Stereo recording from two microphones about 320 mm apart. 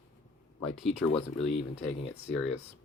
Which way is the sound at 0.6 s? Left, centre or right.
Centre.